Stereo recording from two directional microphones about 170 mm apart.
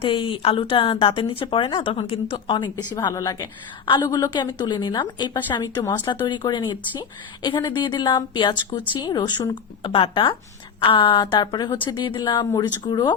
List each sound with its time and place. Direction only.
0.0 s a woman's voice: 30° left (ahead or behind)